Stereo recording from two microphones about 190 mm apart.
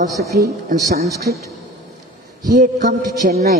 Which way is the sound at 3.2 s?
45° right (ahead or behind).